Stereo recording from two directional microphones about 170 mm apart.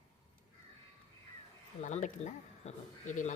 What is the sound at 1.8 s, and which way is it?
Speech, 45° left (ahead or behind).